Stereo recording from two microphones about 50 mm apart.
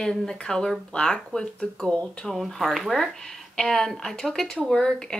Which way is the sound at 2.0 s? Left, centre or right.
Centre.